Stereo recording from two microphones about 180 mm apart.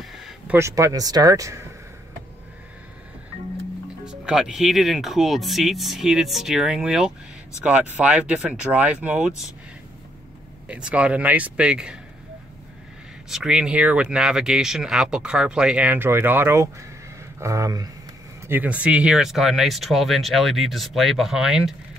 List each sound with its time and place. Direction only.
0.0 s a sound: centre (ahead or behind)
0.6 s speech: 15° right (ahead or behind)
4.0 s speech: 5° right (ahead or behind)
10.7 s speech: 5° right (ahead or behind)
13.3 s speech: 5° right (ahead or behind); by 17.9 s 20° right (ahead or behind)
18.5 s speech: 10° right (ahead or behind)